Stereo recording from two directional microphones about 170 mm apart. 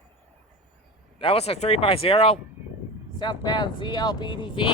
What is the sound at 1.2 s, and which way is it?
Speech, 35° left (ahead or behind).